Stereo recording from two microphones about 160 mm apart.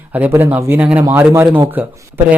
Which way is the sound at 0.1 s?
10° right (ahead or behind).